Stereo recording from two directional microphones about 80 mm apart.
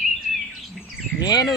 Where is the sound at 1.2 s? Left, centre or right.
Left.